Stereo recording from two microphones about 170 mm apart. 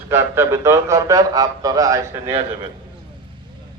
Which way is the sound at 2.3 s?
35° right (ahead or behind).